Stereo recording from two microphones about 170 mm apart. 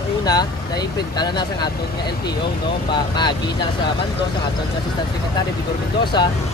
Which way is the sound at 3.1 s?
25° left (ahead or behind).